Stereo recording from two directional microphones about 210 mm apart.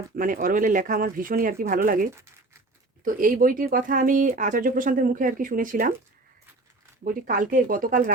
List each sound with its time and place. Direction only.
0.2 s speech: 40° right (ahead or behind)
7.0 s speech: 40° right (ahead or behind)